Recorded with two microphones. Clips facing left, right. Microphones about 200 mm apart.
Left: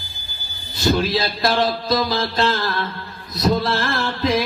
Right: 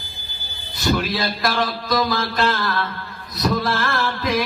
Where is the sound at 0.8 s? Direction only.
25° left (ahead or behind).